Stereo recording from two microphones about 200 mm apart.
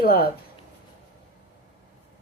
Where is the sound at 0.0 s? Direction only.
50° left (ahead or behind).